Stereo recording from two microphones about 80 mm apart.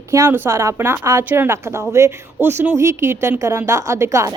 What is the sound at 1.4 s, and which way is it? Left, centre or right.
A woman's voice, right.